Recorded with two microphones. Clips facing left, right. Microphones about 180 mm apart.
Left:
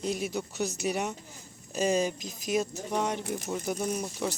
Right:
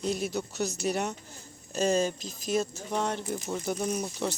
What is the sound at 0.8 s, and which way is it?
Speech, 5° left (ahead or behind).